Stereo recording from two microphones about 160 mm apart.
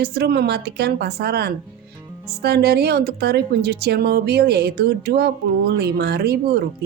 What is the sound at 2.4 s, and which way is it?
Speech, 90° right.